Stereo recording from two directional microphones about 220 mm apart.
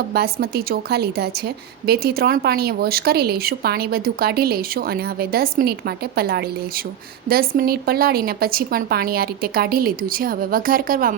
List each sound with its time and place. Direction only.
0.1 s speech: 45° right (ahead or behind)